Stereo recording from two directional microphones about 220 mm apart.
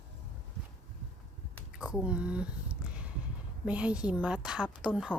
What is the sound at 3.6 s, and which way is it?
A woman's voice, 5° right (ahead or behind).